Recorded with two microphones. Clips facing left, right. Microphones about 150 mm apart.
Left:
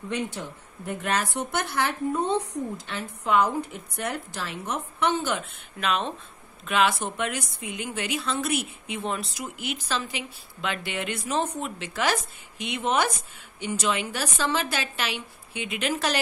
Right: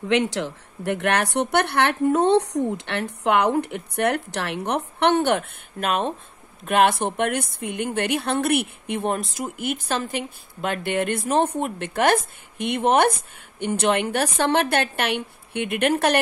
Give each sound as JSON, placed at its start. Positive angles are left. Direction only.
{"t": 0.1, "sound": "a woman's voice", "side_deg": -85}